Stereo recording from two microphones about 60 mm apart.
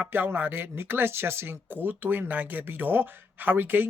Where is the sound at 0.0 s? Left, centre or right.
Right.